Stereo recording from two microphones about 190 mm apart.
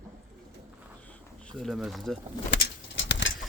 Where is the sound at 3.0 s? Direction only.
70° left (ahead or behind).